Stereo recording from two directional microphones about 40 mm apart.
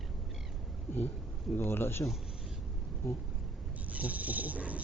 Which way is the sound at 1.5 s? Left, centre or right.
Left.